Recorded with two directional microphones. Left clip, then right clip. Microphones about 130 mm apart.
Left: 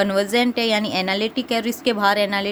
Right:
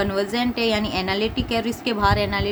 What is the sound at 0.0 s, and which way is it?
A woman's voice, 75° left (ahead or behind).